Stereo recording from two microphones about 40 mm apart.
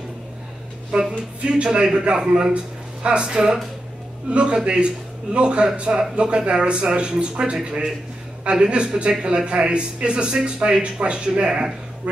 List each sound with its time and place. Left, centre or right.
1.1 s speech: right